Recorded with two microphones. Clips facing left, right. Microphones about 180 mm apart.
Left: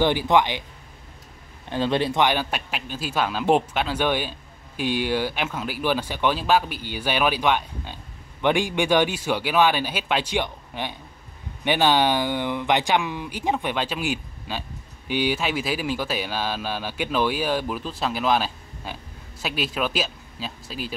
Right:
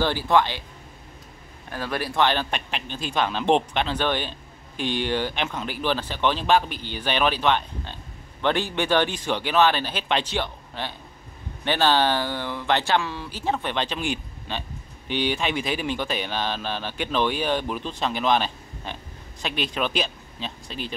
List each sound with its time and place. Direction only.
0.0 s speech: 15° left (ahead or behind)
1.7 s speech: 25° left (ahead or behind)
2.2 s a man's voice: 10° left (ahead or behind)